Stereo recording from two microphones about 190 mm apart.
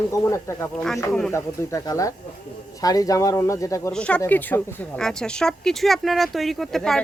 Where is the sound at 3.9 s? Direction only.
5° left (ahead or behind).